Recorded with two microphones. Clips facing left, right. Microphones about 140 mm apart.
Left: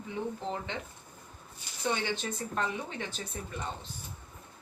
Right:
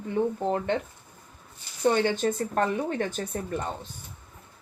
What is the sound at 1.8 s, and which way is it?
Speech, 50° right (ahead or behind).